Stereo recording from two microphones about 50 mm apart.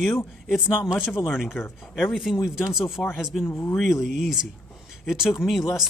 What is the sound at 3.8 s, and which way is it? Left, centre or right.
Speech, centre.